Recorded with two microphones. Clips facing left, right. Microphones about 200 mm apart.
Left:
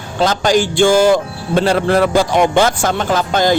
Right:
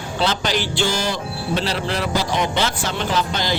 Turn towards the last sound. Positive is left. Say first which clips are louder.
# left 7 dB
turn(degrees=50)  # may be behind; listen again after turning